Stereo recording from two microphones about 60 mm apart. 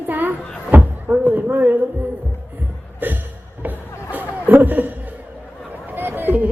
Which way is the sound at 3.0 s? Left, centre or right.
Right.